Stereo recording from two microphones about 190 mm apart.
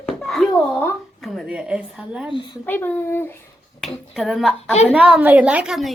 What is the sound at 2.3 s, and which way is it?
Speech, 25° left (ahead or behind).